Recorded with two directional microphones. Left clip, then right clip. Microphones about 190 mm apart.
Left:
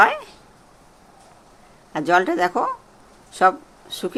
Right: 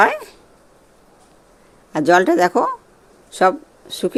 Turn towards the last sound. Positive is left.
turn(degrees=-30)  # may be behind; listen again after turning